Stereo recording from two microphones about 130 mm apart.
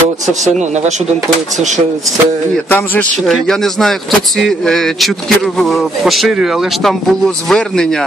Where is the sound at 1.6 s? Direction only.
65° right (ahead or behind).